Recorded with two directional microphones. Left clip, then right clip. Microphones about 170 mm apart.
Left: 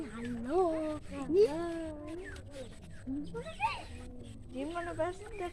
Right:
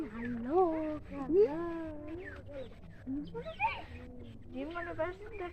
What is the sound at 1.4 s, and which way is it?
Speech, 15° right (ahead or behind).